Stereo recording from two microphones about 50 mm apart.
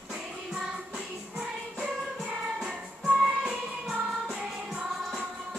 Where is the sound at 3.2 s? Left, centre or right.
Centre.